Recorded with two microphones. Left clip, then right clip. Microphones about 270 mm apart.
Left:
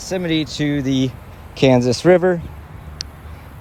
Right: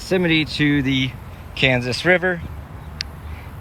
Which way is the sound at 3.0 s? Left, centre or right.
Left.